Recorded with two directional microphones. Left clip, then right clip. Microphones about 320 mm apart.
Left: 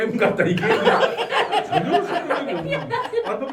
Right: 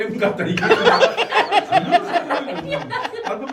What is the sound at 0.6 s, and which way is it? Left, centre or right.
Chuckle, right.